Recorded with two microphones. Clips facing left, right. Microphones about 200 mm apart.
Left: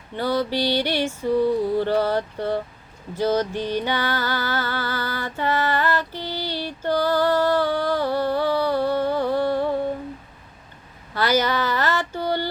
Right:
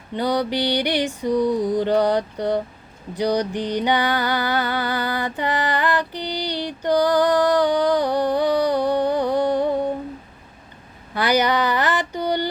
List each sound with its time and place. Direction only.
0.1 s female singing: 15° right (ahead or behind)
11.1 s speech: 15° right (ahead or behind)